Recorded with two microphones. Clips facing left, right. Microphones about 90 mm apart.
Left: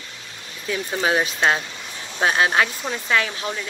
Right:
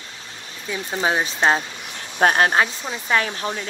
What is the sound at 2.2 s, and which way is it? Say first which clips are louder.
Speech: right 3 dB; 45° right (ahead or behind).